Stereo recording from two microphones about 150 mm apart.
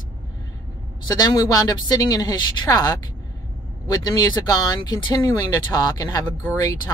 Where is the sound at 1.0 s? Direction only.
25° left (ahead or behind).